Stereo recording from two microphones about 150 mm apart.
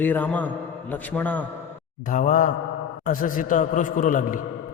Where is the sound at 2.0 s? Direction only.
55° left (ahead or behind).